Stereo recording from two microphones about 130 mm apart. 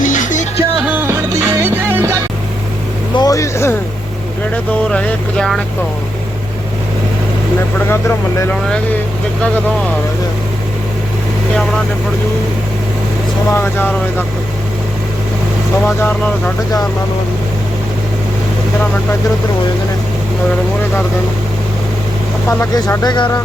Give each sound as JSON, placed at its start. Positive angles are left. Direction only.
{"t": 0.0, "sound": "music", "side_deg": 80}
{"t": 0.9, "sound": "music", "side_deg": -15}
{"t": 3.2, "sound": "vehicle", "side_deg": 25}
{"t": 4.5, "sound": "speech", "side_deg": 10}
{"t": 13.5, "sound": "speech", "side_deg": 15}
{"t": 22.4, "sound": "speech", "side_deg": 20}